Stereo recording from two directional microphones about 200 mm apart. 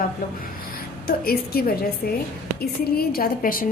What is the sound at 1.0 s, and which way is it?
A woman's voice, 50° left (ahead or behind).